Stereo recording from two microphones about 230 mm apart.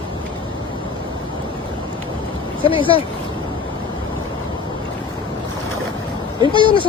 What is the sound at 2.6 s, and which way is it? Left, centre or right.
Speech, left.